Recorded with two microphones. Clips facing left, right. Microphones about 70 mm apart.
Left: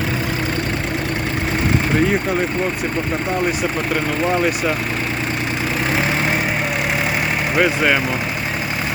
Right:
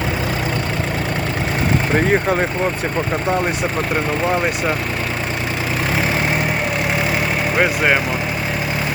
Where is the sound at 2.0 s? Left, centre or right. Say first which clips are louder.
Right 1 dB; right.